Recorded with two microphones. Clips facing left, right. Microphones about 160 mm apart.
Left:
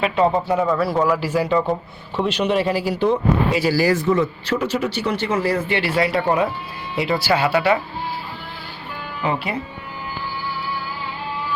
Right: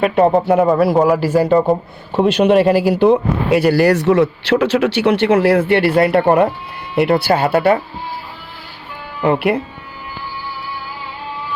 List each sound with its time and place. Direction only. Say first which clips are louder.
0.0 s speech: right 5 dB; 55° right (ahead or behind)
9.2 s speech: right 9 dB; 60° right (ahead or behind)